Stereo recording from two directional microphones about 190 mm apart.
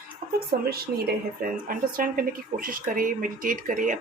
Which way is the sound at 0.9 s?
50° right (ahead or behind).